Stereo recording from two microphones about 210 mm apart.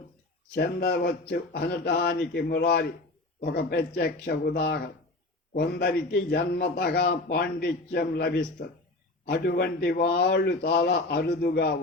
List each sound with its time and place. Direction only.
0.5 s a man's voice: 50° left (ahead or behind)
9.3 s a man's voice: 50° left (ahead or behind)